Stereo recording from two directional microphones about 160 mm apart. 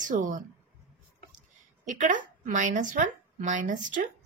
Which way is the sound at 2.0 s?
50° right (ahead or behind).